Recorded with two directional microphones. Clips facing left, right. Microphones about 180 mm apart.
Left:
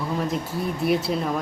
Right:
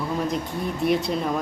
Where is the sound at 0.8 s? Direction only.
Centre (ahead or behind).